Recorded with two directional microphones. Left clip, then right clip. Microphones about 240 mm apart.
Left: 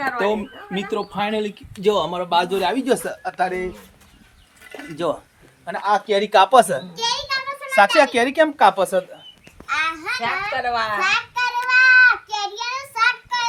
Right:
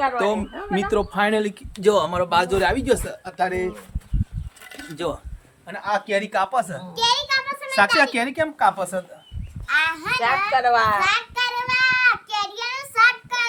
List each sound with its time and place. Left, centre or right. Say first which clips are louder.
0.3 s speech: even; centre
1.2 s speech: right 2 dB; centre
1.7 s speech: right 1 dB; centre
2.0 s a child's voice: right 2 dB; centre
2.5 s speech: even; centre
5.0 s speech: left 4 dB; centre; by 6.7 s left
6.9 s a sound: right 7 dB; centre
7.8 s a child's voice: left 3 dB; left
9.7 s a sound: right 2 dB; centre
10.5 s a child's voice: right 4 dB; centre
11.0 s child singing: left 1 dB; centre